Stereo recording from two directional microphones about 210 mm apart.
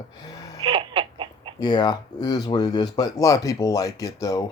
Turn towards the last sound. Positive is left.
turn(degrees=15)  # may be behind; listen again after turning